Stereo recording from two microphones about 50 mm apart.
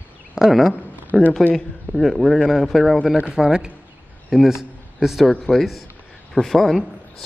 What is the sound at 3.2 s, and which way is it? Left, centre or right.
Speech, centre.